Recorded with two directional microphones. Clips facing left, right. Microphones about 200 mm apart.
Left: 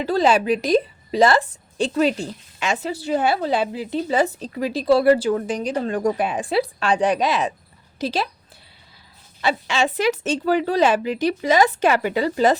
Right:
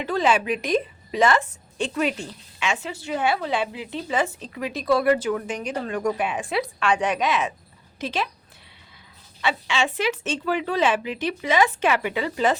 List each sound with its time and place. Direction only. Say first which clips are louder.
0.0 s a woman's voice: left 4 dB; 35° left (ahead or behind)
9.4 s a woman's voice: left 3 dB; 40° left (ahead or behind)